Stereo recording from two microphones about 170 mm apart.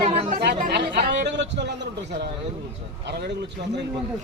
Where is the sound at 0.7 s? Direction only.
85° right.